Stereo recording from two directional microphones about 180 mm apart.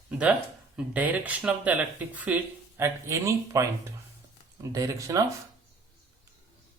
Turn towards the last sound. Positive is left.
turn(degrees=-20)  # may be behind; listen again after turning